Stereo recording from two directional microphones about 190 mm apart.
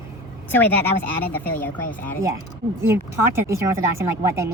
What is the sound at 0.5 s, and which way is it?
Speech, 10° left (ahead or behind).